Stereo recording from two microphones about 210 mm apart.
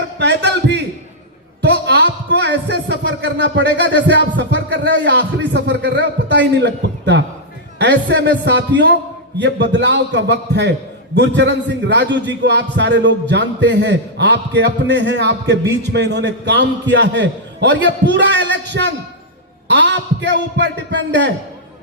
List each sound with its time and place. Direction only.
0.2 s a man's voice: 55° right (ahead or behind)